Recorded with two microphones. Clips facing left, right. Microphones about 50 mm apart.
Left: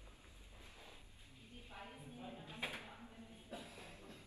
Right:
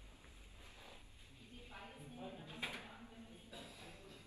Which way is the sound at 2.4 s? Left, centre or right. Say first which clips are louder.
Left 2 dB; left.